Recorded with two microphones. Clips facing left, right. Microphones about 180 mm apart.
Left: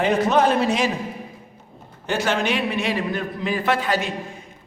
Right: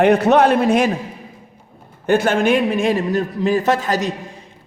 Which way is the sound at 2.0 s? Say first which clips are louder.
Right 7 dB; 55° right (ahead or behind).